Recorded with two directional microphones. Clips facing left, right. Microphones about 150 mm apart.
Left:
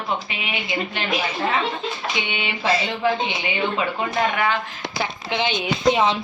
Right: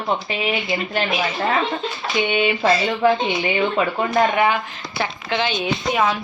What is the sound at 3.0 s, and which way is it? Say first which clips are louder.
Speech: right 5 dB; 45° right (ahead or behind).